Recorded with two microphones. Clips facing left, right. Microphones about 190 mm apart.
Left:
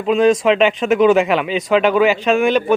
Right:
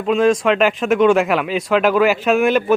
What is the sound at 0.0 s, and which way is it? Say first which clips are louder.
Speech: left 2 dB; centre (ahead or behind).